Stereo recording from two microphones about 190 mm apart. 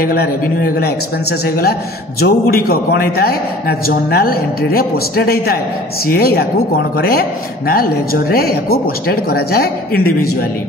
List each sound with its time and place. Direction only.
0.0 s a man's voice: 55° left (ahead or behind)